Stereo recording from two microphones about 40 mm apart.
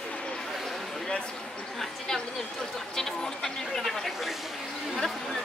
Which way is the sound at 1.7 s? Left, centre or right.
Centre.